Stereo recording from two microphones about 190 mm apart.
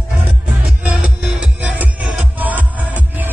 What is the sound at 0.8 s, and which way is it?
Music, 10° right (ahead or behind).